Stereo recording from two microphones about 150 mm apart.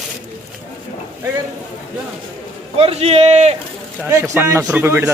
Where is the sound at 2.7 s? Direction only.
45° right (ahead or behind).